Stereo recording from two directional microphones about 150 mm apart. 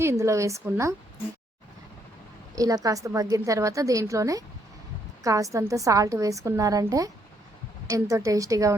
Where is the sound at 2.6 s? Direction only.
25° right (ahead or behind).